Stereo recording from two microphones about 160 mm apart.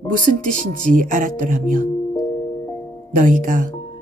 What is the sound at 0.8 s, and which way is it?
Speech, 55° right (ahead or behind).